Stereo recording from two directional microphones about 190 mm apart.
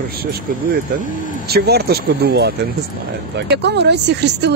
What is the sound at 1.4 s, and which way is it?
Speech, 55° right (ahead or behind).